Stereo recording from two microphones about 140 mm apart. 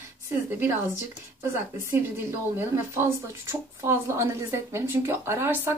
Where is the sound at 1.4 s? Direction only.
20° right (ahead or behind).